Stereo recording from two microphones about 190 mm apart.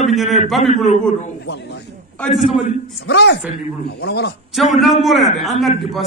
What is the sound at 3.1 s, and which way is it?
Speech, 65° left (ahead or behind).